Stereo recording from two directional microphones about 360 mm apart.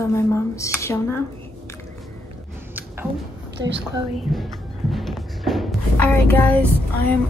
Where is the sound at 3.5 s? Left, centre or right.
Right.